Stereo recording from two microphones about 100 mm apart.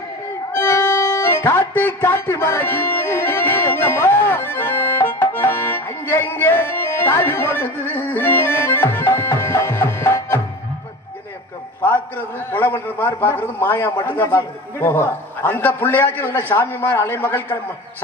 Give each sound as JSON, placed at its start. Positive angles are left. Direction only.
{"t": 0.5, "sound": "music", "side_deg": 25}
{"t": 12.4, "sound": "a man's voice", "side_deg": 20}